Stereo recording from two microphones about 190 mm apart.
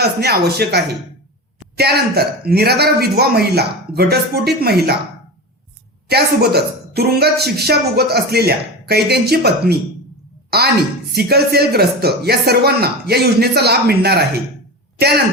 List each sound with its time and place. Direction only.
0.0 s speech: 55° right (ahead or behind)
6.1 s speech: 55° right (ahead or behind)